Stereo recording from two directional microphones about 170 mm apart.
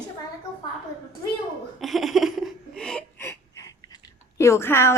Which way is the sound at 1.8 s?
Centre (ahead or behind).